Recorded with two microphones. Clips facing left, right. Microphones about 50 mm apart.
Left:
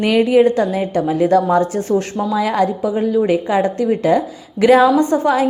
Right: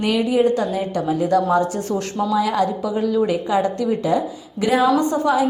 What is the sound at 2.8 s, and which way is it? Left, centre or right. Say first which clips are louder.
A woman's voice: left 3 dB; left.